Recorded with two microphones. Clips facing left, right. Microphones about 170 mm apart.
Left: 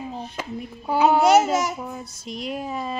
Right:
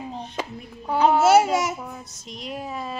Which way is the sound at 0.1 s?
5° left (ahead or behind).